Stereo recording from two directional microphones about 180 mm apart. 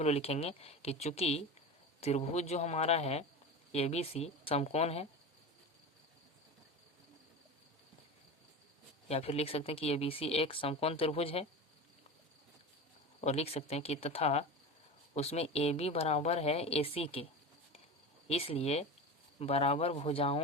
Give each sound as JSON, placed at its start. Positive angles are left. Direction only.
{"t": 0.0, "sound": "speech", "side_deg": 35}
{"t": 9.0, "sound": "speech", "side_deg": 35}
{"t": 13.2, "sound": "speech", "side_deg": 35}
{"t": 18.3, "sound": "speech", "side_deg": 35}